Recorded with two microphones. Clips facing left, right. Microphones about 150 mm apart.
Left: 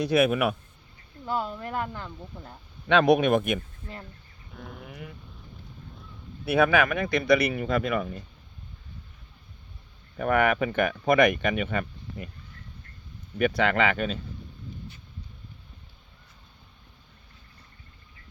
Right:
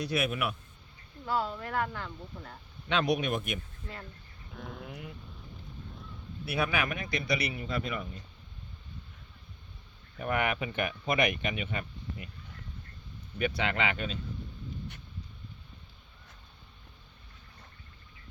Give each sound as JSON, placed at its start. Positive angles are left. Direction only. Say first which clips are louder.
{"t": 0.0, "sound": "a man's voice", "louder": "left 9 dB", "side_deg": 55}
{"t": 1.3, "sound": "speech", "louder": "left 2 dB", "side_deg": 20}
{"t": 2.9, "sound": "a man's voice", "louder": "left 9 dB", "side_deg": 60}
{"t": 4.5, "sound": "speech", "louder": "even", "side_deg": 0}
{"t": 6.6, "sound": "a man's voice", "louder": "left 9 dB", "side_deg": 60}
{"t": 10.2, "sound": "speech", "louder": "left 8 dB", "side_deg": 45}
{"t": 13.6, "sound": "speech", "louder": "left 9 dB", "side_deg": 50}